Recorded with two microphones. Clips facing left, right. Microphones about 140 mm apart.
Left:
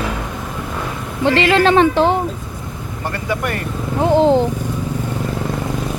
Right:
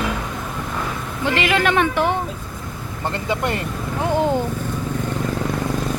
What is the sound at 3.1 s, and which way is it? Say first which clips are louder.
Speech: left 1 dB; 20° right (ahead or behind).